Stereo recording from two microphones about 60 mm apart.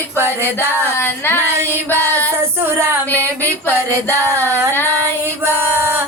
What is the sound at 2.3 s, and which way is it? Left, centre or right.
Child singing, right.